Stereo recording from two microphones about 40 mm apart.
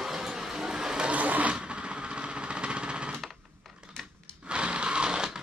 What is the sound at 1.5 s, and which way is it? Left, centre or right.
Vehicle, right.